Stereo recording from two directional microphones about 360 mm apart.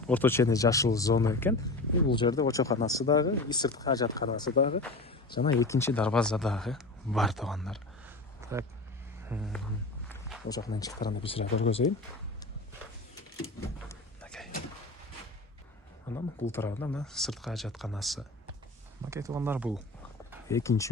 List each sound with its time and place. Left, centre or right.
0.1 s speech: centre
10.1 s a sound: centre
10.5 s speech: centre
13.8 s a sound: centre
16.1 s speech: centre
20.5 s speech: centre